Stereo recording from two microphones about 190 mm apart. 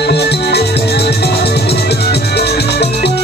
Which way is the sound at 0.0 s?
60° left (ahead or behind).